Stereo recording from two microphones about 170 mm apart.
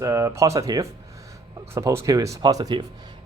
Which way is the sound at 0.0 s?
15° right (ahead or behind).